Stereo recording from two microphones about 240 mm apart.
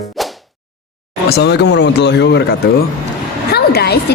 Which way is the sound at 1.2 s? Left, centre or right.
Left.